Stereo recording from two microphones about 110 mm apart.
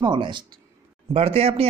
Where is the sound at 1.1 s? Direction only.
60° right (ahead or behind).